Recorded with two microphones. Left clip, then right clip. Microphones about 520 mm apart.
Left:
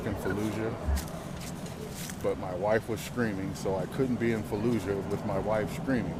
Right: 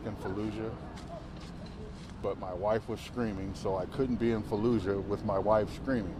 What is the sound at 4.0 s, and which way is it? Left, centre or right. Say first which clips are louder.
Speech: left 1 dB; right.